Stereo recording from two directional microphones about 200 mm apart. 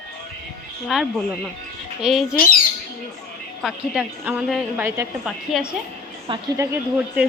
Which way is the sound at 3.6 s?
5° right (ahead or behind).